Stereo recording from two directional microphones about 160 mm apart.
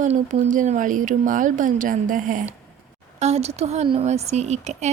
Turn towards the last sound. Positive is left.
turn(degrees=-45)  # may be behind; listen again after turning